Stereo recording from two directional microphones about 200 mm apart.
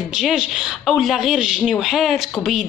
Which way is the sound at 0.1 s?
Centre (ahead or behind).